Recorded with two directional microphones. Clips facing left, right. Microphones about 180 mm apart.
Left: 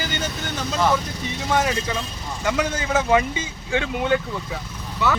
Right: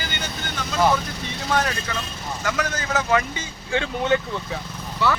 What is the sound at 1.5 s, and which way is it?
Speech, 15° left (ahead or behind).